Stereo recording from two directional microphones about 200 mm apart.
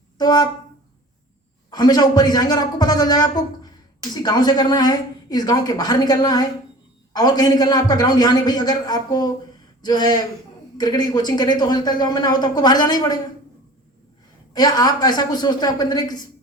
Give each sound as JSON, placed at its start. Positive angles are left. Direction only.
{"t": 0.2, "sound": "speech", "side_deg": 20}
{"t": 1.7, "sound": "speech", "side_deg": 20}
{"t": 14.5, "sound": "speech", "side_deg": 20}